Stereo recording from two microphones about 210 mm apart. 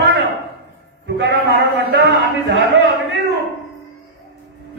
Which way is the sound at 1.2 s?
55° right (ahead or behind).